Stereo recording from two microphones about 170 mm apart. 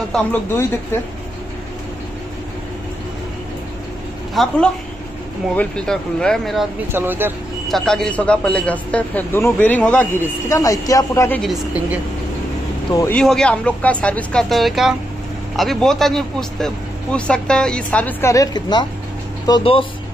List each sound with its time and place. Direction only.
0.1 s speech: 10° left (ahead or behind)
4.4 s a man's voice: centre (ahead or behind)
5.6 s a man's voice: 5° left (ahead or behind)
6.9 s a woman's voice: 10° right (ahead or behind)
7.6 s speech: 5° left (ahead or behind)
11.4 s a woman's voice: 5° right (ahead or behind)
12.9 s speech: 15° left (ahead or behind)
13.2 s a man's voice: 5° left (ahead or behind); by 19.9 s 30° left (ahead or behind)